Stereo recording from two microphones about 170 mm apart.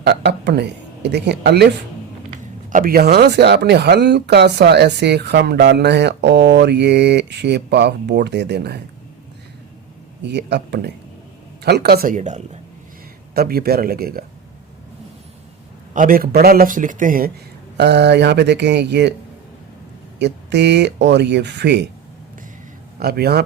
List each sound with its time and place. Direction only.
0.0 s speech: 75° right (ahead or behind)
2.7 s speech: 60° right (ahead or behind); by 8.8 s 75° right (ahead or behind)
10.2 s speech: 85° right
11.6 s speech: 70° right (ahead or behind)
12.1 s speech: 45° right (ahead or behind)
13.3 s a man's voice: 65° right (ahead or behind)
15.9 s a man's voice: 55° right (ahead or behind)
17.7 s speech: 80° right
20.1 s speech: 90° right
23.0 s speech: 70° right (ahead or behind)